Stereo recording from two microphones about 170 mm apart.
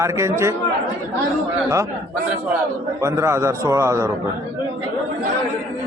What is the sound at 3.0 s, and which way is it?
A man's voice, 15° right (ahead or behind).